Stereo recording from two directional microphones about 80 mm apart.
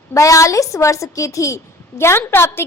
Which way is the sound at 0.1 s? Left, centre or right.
Left.